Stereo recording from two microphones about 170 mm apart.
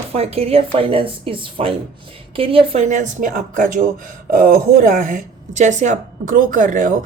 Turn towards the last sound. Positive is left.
turn(degrees=-50)  # may be behind; listen again after turning